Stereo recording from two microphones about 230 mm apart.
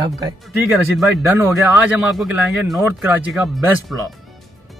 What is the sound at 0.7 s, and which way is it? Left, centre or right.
Speech, centre.